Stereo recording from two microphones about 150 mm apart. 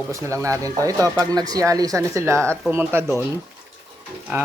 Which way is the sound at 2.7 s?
15° right (ahead or behind).